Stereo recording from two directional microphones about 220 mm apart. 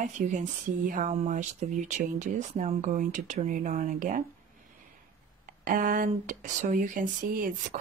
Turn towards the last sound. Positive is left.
turn(degrees=-40)  # may be behind; listen again after turning